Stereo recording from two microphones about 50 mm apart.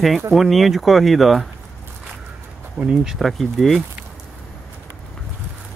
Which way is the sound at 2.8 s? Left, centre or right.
Centre.